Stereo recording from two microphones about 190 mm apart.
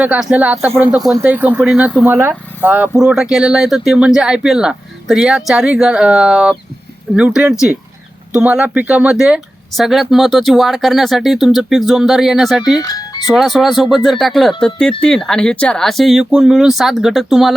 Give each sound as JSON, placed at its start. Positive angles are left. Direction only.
{"t": 0.0, "sound": "speech", "side_deg": -5}
{"t": 12.8, "sound": "speech", "side_deg": 20}
{"t": 13.2, "sound": "speech", "side_deg": 0}